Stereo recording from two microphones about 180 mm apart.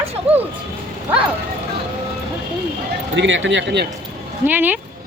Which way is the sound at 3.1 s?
90° right.